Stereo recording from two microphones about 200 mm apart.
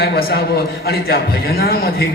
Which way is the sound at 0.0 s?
50° left (ahead or behind).